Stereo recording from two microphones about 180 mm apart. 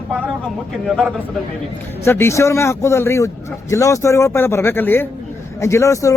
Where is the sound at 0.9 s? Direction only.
Centre (ahead or behind).